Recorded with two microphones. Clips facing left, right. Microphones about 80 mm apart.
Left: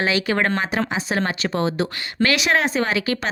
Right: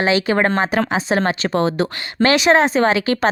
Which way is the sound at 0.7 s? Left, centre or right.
Right.